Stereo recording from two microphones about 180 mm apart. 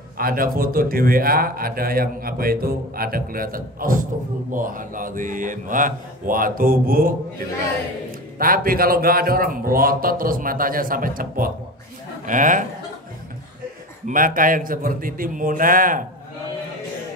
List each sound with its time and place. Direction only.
0.2 s a man's voice: 55° right (ahead or behind)
14.0 s a man's voice: 50° right (ahead or behind)